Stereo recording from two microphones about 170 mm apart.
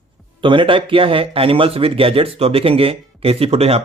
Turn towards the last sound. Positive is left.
turn(degrees=-35)  # may be behind; listen again after turning